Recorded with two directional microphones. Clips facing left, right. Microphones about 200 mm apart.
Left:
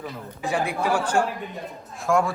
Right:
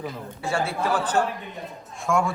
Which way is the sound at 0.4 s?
15° left (ahead or behind).